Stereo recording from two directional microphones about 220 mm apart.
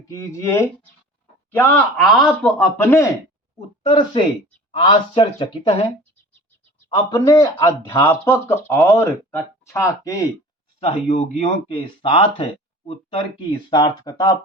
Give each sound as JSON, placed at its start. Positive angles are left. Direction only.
{"t": 0.0, "sound": "speech", "side_deg": 15}
{"t": 3.6, "sound": "speech", "side_deg": 20}
{"t": 6.9, "sound": "speech", "side_deg": 20}
{"t": 10.8, "sound": "speech", "side_deg": 30}